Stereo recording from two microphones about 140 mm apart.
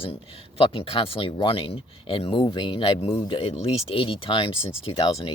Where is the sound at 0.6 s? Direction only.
40° left (ahead or behind).